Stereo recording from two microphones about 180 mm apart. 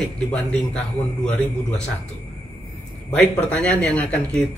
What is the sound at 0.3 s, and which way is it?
A man's voice, 5° left (ahead or behind).